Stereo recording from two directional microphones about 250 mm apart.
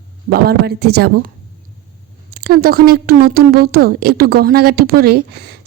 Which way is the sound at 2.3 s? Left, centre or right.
Right.